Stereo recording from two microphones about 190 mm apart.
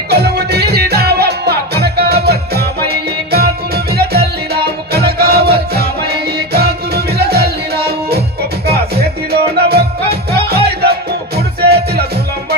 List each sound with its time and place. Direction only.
0.1 s music: 55° right (ahead or behind)
8.7 s music: 55° right (ahead or behind)